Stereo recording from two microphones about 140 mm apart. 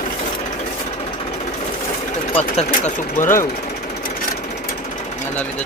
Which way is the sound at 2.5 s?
55° left (ahead or behind).